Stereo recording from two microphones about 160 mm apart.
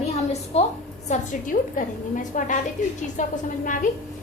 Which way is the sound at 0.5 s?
40° left (ahead or behind).